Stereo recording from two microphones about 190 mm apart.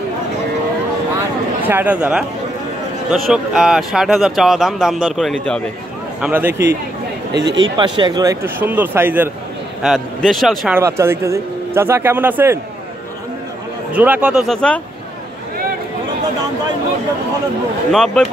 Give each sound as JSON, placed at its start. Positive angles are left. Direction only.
{"t": 1.7, "sound": "a man's voice", "side_deg": -10}
{"t": 6.2, "sound": "a man's voice", "side_deg": -10}
{"t": 7.3, "sound": "speech", "side_deg": -70}
{"t": 7.6, "sound": "a man's voice", "side_deg": -25}
{"t": 9.8, "sound": "speech", "side_deg": 0}
{"t": 10.8, "sound": "a man's voice", "side_deg": -15}
{"t": 13.9, "sound": "speech", "side_deg": -5}
{"t": 17.9, "sound": "speech", "side_deg": 5}